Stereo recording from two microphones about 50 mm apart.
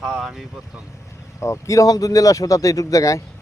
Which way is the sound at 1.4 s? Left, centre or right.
Left.